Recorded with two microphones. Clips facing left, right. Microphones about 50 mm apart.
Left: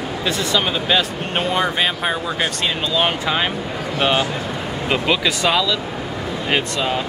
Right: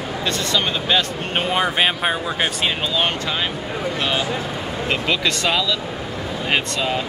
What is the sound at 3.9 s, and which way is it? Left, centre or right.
Speech, left.